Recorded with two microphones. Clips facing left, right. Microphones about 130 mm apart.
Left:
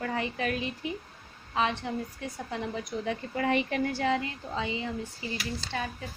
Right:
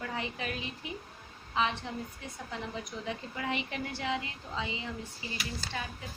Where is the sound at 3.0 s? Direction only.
50° left (ahead or behind).